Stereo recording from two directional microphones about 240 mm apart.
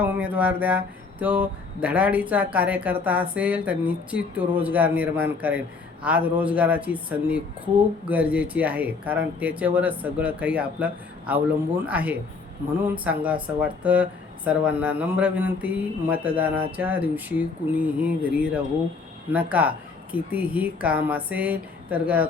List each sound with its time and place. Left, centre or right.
0.0 s speech: centre